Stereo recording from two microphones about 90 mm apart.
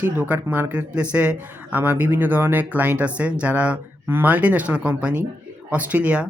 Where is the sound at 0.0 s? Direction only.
20° right (ahead or behind).